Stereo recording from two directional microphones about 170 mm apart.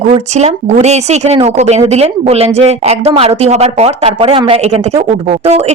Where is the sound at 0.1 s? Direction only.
40° right (ahead or behind).